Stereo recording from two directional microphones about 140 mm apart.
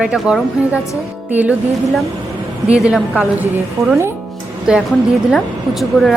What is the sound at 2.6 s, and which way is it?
Speech, 5° right (ahead or behind).